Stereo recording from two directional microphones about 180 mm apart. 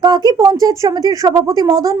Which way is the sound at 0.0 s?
25° right (ahead or behind).